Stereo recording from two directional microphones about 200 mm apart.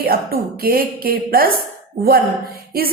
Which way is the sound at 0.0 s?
50° right (ahead or behind).